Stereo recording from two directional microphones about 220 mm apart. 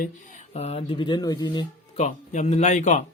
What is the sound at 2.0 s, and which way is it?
Speech, 35° left (ahead or behind).